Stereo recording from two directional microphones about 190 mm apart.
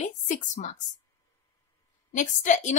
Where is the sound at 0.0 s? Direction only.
40° left (ahead or behind).